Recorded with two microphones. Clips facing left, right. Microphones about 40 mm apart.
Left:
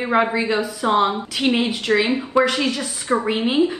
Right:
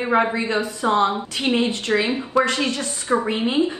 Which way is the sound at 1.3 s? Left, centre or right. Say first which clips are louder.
Left 2 dB; left.